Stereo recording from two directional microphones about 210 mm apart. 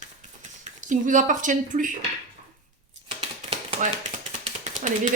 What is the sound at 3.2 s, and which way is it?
Typewriter, 25° right (ahead or behind).